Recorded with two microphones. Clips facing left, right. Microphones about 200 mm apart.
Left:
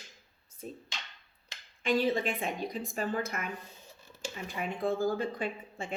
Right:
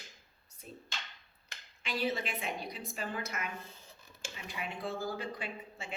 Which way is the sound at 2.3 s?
45° left (ahead or behind).